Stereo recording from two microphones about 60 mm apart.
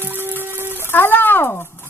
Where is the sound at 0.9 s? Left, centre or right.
Left.